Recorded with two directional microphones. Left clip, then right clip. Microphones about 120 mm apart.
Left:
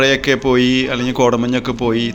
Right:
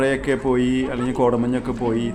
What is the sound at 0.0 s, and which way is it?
A man's voice, 15° left (ahead or behind).